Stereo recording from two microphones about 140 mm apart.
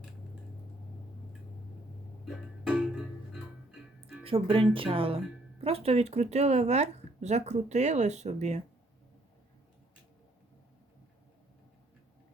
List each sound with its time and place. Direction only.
2.2 s music: 5° right (ahead or behind)
4.2 s speech: 40° right (ahead or behind)